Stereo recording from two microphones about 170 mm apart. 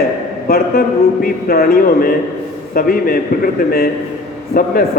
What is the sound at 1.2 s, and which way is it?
A man's voice, 60° left (ahead or behind).